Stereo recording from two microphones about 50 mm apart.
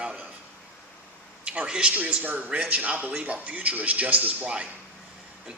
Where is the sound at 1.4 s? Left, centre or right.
Right.